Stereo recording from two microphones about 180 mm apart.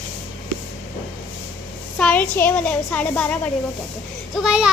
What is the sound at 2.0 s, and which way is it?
A child's voice, 10° left (ahead or behind).